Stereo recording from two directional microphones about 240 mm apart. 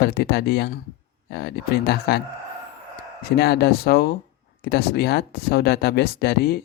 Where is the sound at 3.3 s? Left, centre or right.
Left.